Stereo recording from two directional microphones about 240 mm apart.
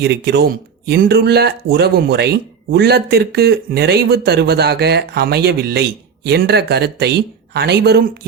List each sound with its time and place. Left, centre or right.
0.0 s speech: right